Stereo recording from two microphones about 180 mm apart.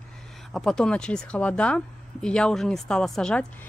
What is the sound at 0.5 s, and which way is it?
Speech, centre (ahead or behind).